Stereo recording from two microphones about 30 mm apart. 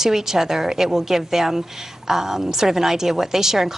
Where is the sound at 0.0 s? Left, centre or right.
Centre.